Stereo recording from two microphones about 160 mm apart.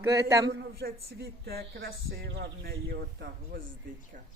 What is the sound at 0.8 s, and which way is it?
Speech, 80° right.